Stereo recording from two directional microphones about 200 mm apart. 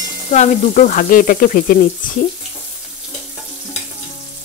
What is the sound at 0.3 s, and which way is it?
Frying, 35° left (ahead or behind).